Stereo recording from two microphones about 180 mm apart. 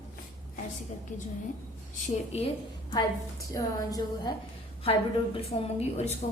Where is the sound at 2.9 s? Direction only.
20° left (ahead or behind).